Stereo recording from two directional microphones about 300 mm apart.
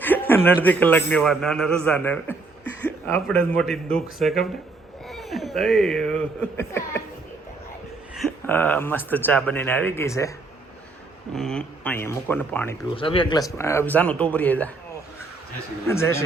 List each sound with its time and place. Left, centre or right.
0.0 s a man's voice: centre
8.1 s speech: centre
11.3 s a man's voice: centre
12.9 s a man's voice: centre
15.9 s speech: centre